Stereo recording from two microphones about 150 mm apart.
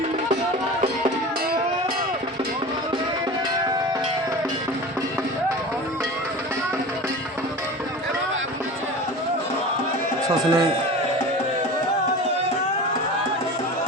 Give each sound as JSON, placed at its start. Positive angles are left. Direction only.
{"t": 10.2, "sound": "speech", "side_deg": -25}